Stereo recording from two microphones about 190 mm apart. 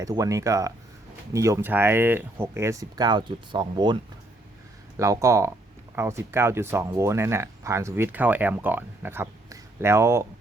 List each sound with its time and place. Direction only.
0.0 s speech: 15° right (ahead or behind)
4.9 s speech: 15° right (ahead or behind)